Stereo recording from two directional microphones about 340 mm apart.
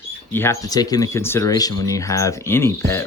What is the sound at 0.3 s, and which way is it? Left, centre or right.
Speech, centre.